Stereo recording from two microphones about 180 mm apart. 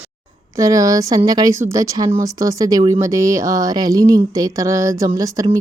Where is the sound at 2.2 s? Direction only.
20° right (ahead or behind).